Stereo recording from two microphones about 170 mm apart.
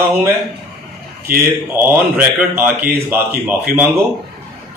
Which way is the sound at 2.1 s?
10° right (ahead or behind).